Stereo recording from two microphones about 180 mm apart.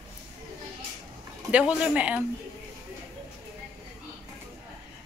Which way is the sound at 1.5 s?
5° right (ahead or behind).